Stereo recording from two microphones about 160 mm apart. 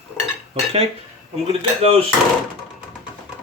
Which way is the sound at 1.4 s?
35° right (ahead or behind).